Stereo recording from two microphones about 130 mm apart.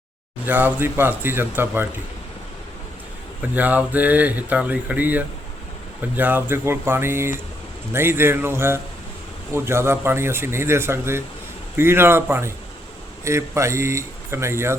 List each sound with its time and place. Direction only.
0.4 s speech: 15° right (ahead or behind)
3.5 s speech: 15° right (ahead or behind)